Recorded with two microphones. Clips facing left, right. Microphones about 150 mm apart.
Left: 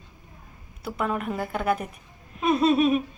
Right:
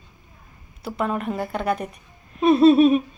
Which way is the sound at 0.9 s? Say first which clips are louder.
Right 3 dB; centre (ahead or behind).